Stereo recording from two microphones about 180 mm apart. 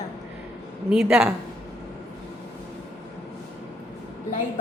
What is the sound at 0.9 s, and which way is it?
Speech, 5° right (ahead or behind).